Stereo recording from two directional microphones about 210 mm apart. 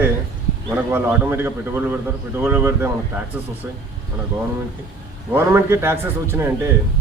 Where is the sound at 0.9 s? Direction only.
10° right (ahead or behind).